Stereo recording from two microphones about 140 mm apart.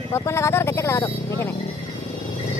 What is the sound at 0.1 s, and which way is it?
Vehicle, 20° left (ahead or behind).